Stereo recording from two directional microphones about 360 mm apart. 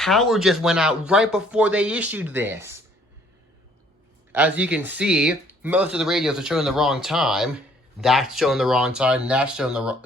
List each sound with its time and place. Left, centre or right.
0.0 s speech: centre
4.3 s speech: centre